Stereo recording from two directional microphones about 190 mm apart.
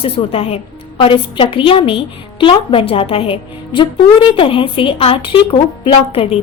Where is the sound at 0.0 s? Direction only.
30° left (ahead or behind).